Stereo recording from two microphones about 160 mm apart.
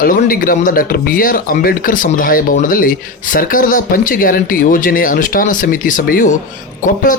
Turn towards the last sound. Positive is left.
turn(degrees=55)  # may be behind; listen again after turning